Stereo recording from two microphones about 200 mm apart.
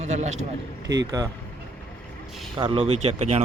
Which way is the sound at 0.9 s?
20° right (ahead or behind).